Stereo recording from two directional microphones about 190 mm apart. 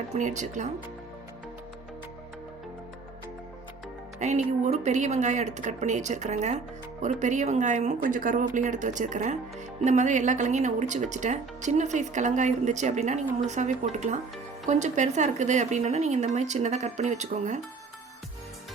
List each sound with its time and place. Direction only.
0.1 s speech: 40° right (ahead or behind)
4.2 s speech: 40° right (ahead or behind)